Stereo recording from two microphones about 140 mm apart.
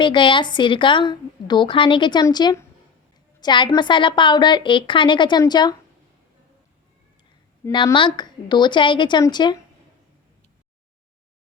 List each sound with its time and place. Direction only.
0.0 s a woman's voice: 35° left (ahead or behind)
7.9 s a woman's voice: 35° left (ahead or behind)